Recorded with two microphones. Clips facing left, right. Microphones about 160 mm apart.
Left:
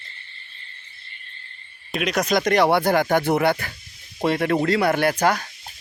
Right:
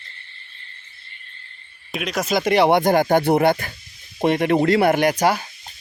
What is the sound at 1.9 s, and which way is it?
Speech, centre (ahead or behind).